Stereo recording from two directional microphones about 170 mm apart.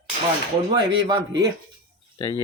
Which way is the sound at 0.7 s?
25° right (ahead or behind).